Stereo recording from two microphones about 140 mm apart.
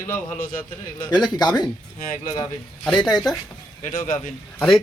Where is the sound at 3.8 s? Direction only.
80° left.